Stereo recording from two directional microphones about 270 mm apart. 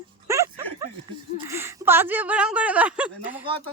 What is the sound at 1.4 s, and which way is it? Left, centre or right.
Speech, centre.